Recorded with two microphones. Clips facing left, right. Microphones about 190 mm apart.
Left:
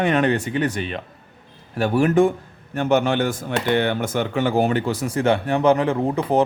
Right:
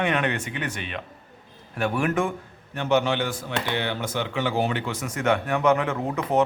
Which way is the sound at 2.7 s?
50° left (ahead or behind).